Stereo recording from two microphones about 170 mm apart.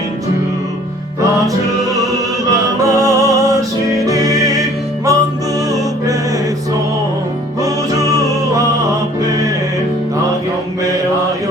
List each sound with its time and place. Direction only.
2.5 s music: 20° right (ahead or behind)
7.6 s music: 20° right (ahead or behind)